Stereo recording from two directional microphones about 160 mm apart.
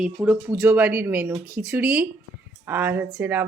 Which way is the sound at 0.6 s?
20° right (ahead or behind).